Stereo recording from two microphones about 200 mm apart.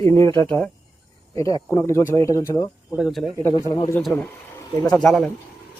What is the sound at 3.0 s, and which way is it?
Speech, centre (ahead or behind).